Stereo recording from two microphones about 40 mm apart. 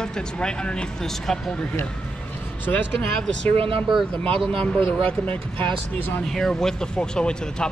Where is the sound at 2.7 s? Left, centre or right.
Left.